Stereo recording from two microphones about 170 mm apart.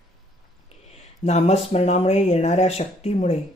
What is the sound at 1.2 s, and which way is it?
Speech, 40° left (ahead or behind).